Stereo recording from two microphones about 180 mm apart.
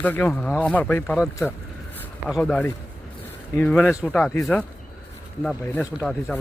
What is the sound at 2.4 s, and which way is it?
Speech, 5° left (ahead or behind).